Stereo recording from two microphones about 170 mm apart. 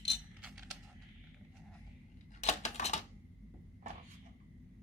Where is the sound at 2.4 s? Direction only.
45° left (ahead or behind).